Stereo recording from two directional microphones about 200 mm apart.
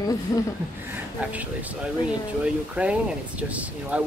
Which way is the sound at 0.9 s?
5° right (ahead or behind).